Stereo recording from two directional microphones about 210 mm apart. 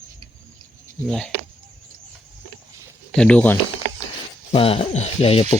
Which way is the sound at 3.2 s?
5° left (ahead or behind).